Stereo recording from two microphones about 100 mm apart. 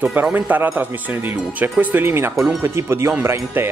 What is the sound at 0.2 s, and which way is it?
A man's voice, 20° right (ahead or behind).